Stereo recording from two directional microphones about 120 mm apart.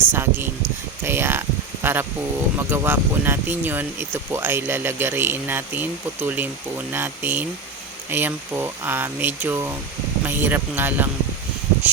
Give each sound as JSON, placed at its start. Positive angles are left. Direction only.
{"t": 0.1, "sound": "speech", "side_deg": -20}
{"t": 1.0, "sound": "a sound", "side_deg": -20}
{"t": 2.6, "sound": "speech", "side_deg": -20}